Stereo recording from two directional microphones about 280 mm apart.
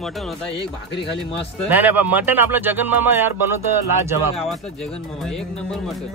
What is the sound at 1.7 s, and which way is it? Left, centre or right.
Speech, centre.